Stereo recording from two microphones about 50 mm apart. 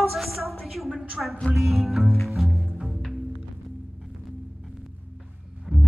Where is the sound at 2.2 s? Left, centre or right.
Centre.